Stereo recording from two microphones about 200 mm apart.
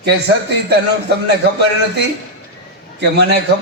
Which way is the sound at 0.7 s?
55° right (ahead or behind).